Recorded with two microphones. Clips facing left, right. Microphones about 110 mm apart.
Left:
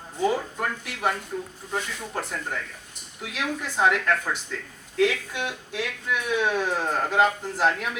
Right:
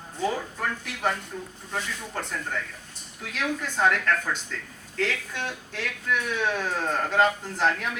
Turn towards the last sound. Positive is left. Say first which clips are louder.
# left 1 dB
turn(degrees=5)  # may be behind; listen again after turning